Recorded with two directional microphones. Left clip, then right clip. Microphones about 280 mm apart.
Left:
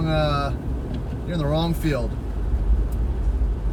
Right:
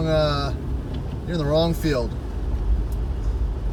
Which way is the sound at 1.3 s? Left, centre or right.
Right.